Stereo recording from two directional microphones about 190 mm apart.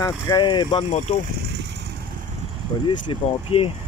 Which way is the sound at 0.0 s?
20° left (ahead or behind).